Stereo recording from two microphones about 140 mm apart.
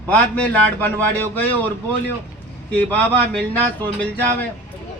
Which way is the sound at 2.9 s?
10° left (ahead or behind).